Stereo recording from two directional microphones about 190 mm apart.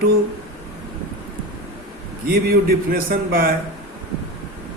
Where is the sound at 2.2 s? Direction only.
55° right (ahead or behind).